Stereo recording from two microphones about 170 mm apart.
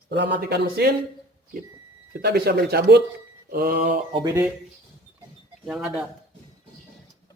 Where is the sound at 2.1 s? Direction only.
70° right (ahead or behind).